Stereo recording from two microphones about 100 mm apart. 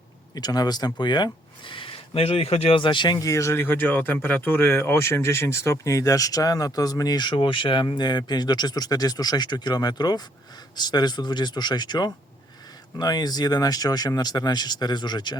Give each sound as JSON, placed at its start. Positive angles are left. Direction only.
{"t": 0.3, "sound": "speech", "side_deg": 45}
{"t": 3.2, "sound": "speech", "side_deg": 30}